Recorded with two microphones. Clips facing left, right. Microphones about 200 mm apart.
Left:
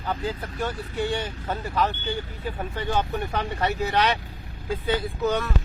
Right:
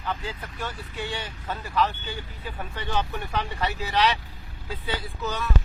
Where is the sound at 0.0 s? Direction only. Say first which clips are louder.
Left 4 dB; 40° left (ahead or behind).